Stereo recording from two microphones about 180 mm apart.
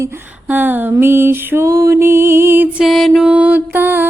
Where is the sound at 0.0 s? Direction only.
10° right (ahead or behind).